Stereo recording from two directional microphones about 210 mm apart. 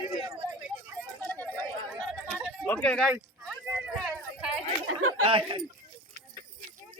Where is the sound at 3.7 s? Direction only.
5° right (ahead or behind).